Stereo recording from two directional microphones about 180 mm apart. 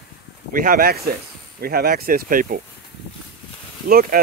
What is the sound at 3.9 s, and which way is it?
Speech, 50° right (ahead or behind).